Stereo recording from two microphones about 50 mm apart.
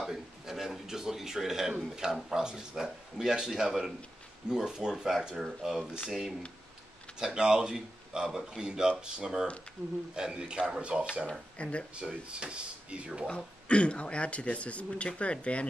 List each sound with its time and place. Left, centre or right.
0.0 s speech: centre
7.2 s speech: centre
11.2 s speech: left
12.0 s speech: right
13.3 s speech: centre